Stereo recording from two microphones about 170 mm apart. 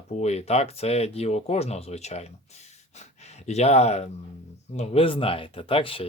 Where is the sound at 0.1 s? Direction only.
40° left (ahead or behind).